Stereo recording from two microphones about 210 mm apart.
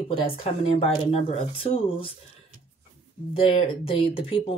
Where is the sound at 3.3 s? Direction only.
25° left (ahead or behind).